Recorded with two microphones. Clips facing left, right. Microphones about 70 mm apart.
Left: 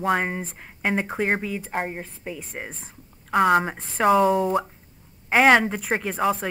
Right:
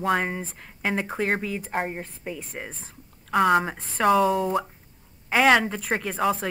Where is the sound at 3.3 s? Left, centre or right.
Centre.